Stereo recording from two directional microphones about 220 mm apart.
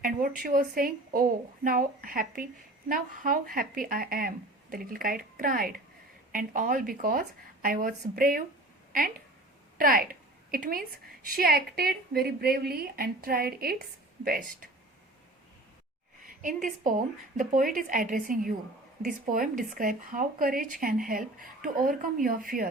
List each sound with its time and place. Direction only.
0.0 s a woman's voice: 40° right (ahead or behind)
16.2 s speech: 35° right (ahead or behind)